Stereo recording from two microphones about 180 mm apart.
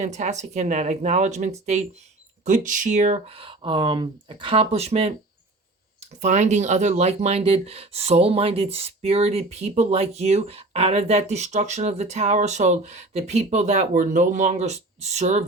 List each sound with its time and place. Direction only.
0.0 s speech: 40° right (ahead or behind)
6.2 s speech: 40° right (ahead or behind)